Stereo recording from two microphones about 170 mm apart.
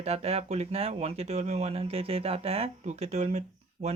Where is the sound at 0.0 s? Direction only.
35° right (ahead or behind).